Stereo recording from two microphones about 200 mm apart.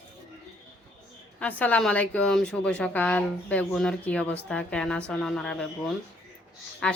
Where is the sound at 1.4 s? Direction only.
5° left (ahead or behind).